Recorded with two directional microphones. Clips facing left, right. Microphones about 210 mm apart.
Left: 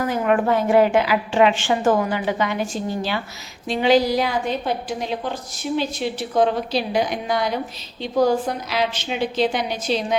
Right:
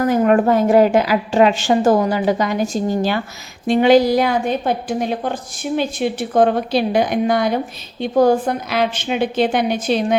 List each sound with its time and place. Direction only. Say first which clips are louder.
0.1 s a woman's voice: right 5 dB; 40° right (ahead or behind)